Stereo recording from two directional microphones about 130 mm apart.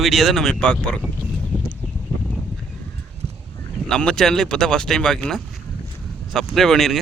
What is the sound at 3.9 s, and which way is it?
Speech, 5° left (ahead or behind).